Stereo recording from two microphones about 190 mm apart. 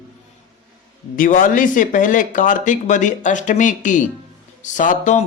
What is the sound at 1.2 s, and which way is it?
Speech, 45° left (ahead or behind).